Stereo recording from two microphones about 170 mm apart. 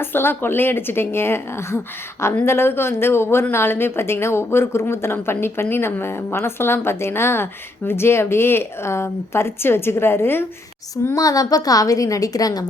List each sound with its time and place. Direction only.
0.0 s a woman's voice: 15° left (ahead or behind)